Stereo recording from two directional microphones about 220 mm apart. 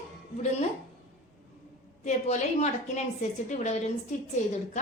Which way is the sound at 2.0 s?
30° left (ahead or behind).